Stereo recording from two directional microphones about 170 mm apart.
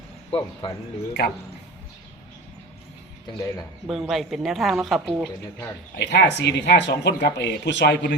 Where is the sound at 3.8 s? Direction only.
Centre (ahead or behind).